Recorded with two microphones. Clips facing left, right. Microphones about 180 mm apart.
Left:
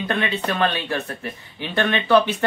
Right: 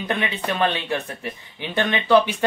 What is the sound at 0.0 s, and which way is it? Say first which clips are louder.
Speech: left 2 dB; 15° right (ahead or behind).